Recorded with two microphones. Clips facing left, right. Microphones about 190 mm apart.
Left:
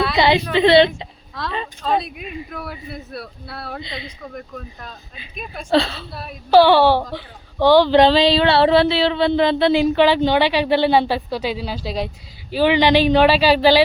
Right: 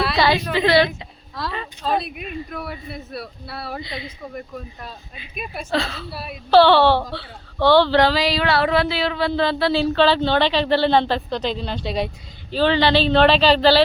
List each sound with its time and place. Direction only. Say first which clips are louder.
0.2 s a woman's voice: left 4 dB; 20° left (ahead or behind)
1.4 s speech: left 2 dB; centre (ahead or behind)
3.8 s a woman's voice: even; 25° left (ahead or behind)
4.2 s speech: right 1 dB; 5° right (ahead or behind)
5.7 s a woman's voice: left 6 dB; 30° left (ahead or behind)
6.1 s speech: right 1 dB; 5° right (ahead or behind)
6.5 s speech: left 1 dB; 10° left (ahead or behind)
12.5 s speech: left 2 dB; 10° left (ahead or behind)